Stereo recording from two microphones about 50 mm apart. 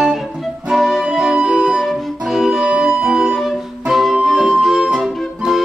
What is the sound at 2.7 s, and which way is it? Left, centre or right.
Organ, centre.